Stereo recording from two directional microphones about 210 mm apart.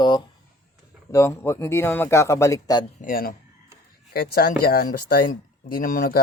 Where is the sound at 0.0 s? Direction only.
20° left (ahead or behind).